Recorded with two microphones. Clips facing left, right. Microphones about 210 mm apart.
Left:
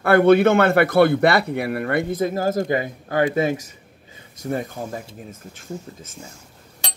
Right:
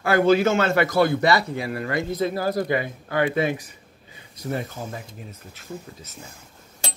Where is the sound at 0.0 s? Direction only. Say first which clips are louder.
Left 4 dB; 60° left (ahead or behind).